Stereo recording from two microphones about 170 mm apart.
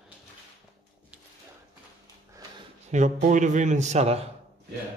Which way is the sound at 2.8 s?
45° right (ahead or behind).